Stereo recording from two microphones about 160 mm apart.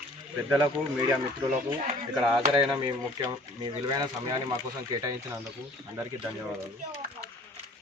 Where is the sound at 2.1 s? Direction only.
5° right (ahead or behind).